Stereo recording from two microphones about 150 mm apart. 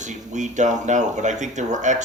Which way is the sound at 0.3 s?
55° right (ahead or behind).